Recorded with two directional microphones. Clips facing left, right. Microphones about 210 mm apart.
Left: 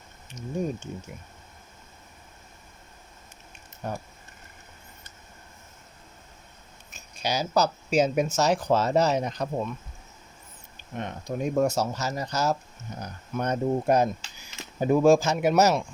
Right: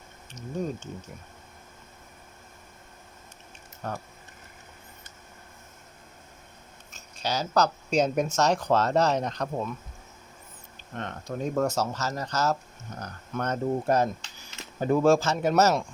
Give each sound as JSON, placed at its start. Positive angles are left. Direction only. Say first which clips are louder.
{"t": 0.3, "sound": "speech", "louder": "left 2 dB", "side_deg": 10}
{"t": 3.8, "sound": "speech", "louder": "left 1 dB", "side_deg": 15}
{"t": 6.9, "sound": "speech", "louder": "left 1 dB", "side_deg": 10}
{"t": 10.8, "sound": "speech", "louder": "left 2 dB", "side_deg": 10}